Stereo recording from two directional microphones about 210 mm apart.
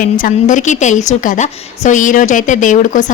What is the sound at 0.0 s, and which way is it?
A woman's voice, 40° left (ahead or behind).